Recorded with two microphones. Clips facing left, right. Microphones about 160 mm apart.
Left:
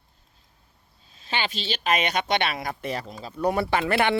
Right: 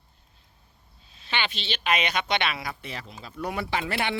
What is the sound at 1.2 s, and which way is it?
Speech, 40° left (ahead or behind).